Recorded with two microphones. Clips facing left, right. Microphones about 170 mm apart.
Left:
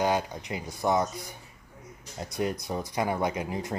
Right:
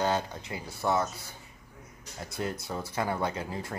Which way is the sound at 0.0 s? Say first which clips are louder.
Left 2 dB; 15° left (ahead or behind).